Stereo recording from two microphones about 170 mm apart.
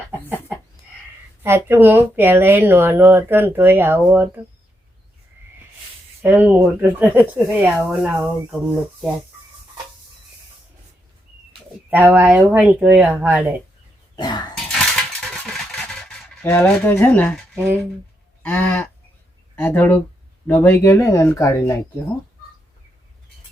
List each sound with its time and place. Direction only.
1.4 s speech: 15° right (ahead or behind)
6.2 s speech: 10° right (ahead or behind)
11.9 s speech: 10° right (ahead or behind)
14.2 s a sound: 25° left (ahead or behind)
14.7 s a sound: 5° left (ahead or behind)
18.4 s speech: 10° left (ahead or behind)